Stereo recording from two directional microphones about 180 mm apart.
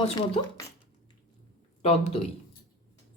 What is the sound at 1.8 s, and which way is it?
Speech, 35° left (ahead or behind).